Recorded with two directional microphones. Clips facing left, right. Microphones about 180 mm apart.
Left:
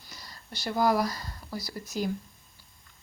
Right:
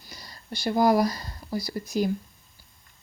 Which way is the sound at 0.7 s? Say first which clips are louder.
Right 4 dB; 15° right (ahead or behind).